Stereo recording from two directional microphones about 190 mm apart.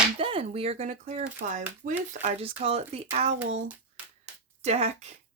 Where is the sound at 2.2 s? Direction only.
30° right (ahead or behind).